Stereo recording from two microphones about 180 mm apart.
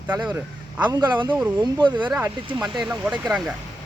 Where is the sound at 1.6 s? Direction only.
25° right (ahead or behind).